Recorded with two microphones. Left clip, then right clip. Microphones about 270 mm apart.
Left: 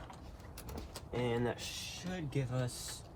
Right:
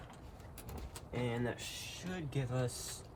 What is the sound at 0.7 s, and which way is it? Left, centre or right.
Vehicle, centre.